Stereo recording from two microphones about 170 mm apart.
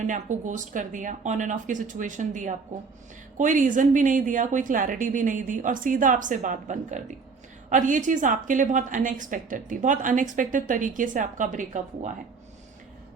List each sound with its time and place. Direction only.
0.0 s a woman's voice: 45° right (ahead or behind)